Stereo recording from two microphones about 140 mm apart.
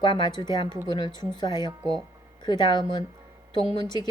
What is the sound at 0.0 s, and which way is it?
A woman's voice, 30° left (ahead or behind).